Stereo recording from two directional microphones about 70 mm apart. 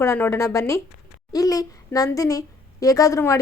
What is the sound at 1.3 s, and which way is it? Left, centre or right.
A woman's voice, left.